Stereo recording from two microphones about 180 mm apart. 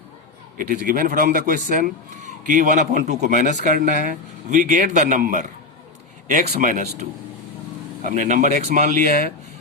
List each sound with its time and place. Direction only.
0.5 s speech: 50° right (ahead or behind)
8.0 s speech: 45° right (ahead or behind)